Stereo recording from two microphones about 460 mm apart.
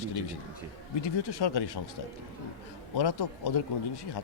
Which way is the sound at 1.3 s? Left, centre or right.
Left.